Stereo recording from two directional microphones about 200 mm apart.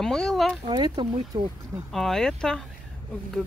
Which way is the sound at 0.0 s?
Centre (ahead or behind).